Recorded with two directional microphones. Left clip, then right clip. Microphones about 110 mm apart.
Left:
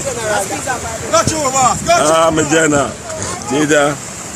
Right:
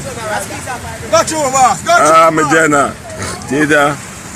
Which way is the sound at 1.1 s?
20° right (ahead or behind).